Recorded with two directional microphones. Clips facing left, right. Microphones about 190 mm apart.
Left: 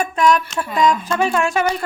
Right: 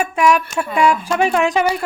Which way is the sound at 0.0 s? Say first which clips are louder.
Right 1 dB; 10° right (ahead or behind).